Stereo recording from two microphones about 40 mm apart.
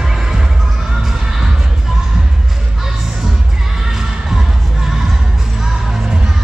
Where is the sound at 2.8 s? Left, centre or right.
Centre.